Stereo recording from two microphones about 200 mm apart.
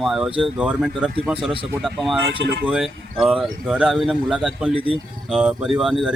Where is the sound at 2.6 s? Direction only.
Centre (ahead or behind).